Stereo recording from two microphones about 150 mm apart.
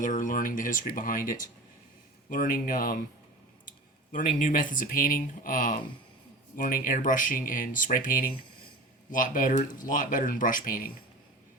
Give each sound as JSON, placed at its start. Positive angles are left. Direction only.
{"t": 0.0, "sound": "speech", "side_deg": 60}